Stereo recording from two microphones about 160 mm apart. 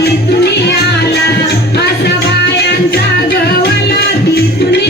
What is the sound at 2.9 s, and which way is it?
Music, 80° left.